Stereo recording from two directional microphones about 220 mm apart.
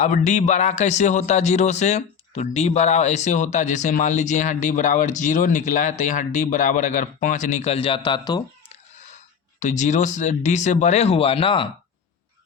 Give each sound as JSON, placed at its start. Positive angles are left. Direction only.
{"t": 0.0, "sound": "a man's voice", "side_deg": 35}
{"t": 9.6, "sound": "a man's voice", "side_deg": 35}